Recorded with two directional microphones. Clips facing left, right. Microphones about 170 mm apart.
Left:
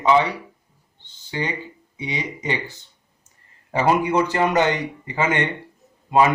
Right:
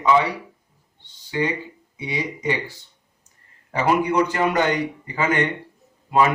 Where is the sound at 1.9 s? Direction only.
20° left (ahead or behind).